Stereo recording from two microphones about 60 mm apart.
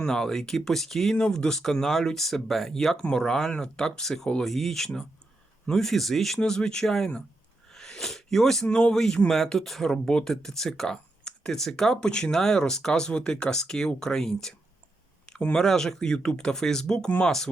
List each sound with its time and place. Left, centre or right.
0.0 s speech: centre
1.1 s speech: centre
7.7 s sneeze: centre
8.6 s speech: left
8.9 s speech: centre
15.3 s a sound: left
15.5 s speech: centre